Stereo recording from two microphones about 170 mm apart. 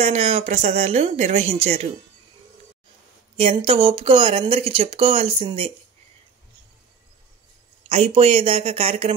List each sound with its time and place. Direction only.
0.0 s speech: 35° right (ahead or behind)
3.3 s speech: 35° right (ahead or behind)
7.9 s speech: 35° right (ahead or behind)